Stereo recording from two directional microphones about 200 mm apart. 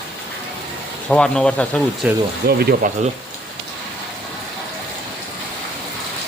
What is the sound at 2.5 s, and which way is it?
Speech, 50° right (ahead or behind).